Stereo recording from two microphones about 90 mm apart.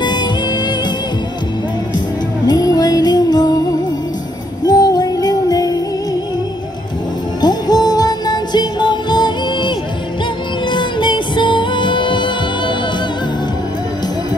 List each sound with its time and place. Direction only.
0.0 s music: 55° left (ahead or behind)
2.4 s music: 45° left (ahead or behind)
4.6 s music: 45° left (ahead or behind)
7.4 s music: 50° left (ahead or behind); by 12.7 s 65° left (ahead or behind)